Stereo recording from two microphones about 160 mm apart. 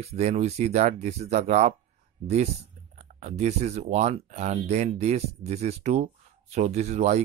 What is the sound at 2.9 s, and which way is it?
Speech, 45° right (ahead or behind).